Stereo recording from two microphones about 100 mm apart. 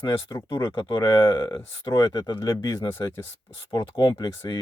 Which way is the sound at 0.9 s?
45° left (ahead or behind).